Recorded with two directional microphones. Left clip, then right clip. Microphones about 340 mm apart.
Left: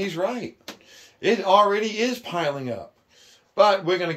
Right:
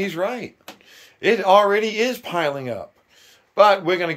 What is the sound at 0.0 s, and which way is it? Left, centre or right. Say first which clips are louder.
Speech: right 2 dB; centre.